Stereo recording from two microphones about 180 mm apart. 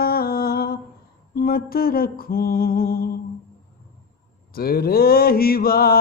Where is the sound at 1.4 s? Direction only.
55° left (ahead or behind).